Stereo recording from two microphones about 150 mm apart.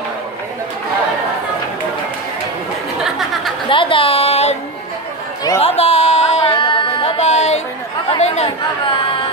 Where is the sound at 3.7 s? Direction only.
35° left (ahead or behind).